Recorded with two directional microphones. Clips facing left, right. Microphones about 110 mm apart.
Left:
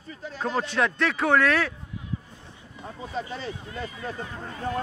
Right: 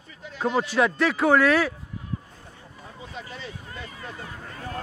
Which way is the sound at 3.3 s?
35° left (ahead or behind).